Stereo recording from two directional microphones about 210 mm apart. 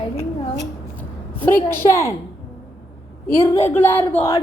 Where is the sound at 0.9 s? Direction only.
10° left (ahead or behind).